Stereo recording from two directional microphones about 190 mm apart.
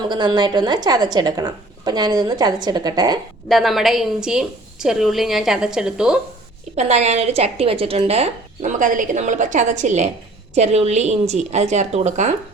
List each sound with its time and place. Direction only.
0.1 s a woman's voice: 20° right (ahead or behind)
3.5 s a woman's voice: centre (ahead or behind)
6.7 s a woman's voice: 35° right (ahead or behind)